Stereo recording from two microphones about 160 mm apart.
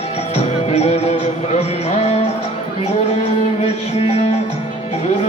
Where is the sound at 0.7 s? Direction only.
40° left (ahead or behind).